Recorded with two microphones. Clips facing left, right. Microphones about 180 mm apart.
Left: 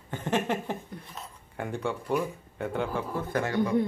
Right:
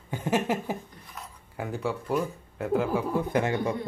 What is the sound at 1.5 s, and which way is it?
Speech, 5° right (ahead or behind).